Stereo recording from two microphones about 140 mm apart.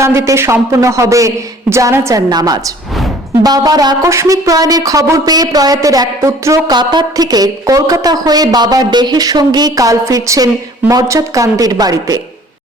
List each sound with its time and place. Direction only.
0.0 s speech: 20° right (ahead or behind)